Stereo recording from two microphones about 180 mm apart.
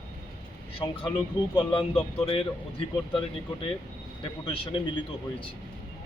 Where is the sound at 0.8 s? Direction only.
30° left (ahead or behind).